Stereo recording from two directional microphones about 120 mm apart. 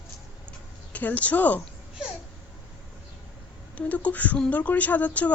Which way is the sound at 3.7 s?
10° left (ahead or behind).